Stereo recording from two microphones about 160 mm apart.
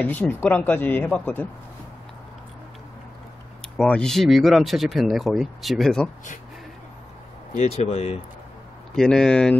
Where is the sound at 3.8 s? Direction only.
5° left (ahead or behind).